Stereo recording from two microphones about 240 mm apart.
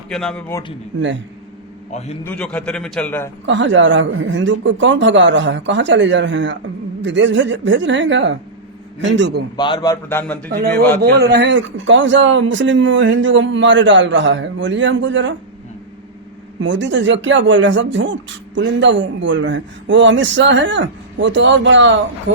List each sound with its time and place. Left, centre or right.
0.1 s a man's voice: centre
0.9 s speech: right
1.9 s a man's voice: left
2.2 s a man's voice: centre
3.4 s speech: right
9.6 s a man's voice: centre
10.5 s a man's voice: right
16.6 s speech: right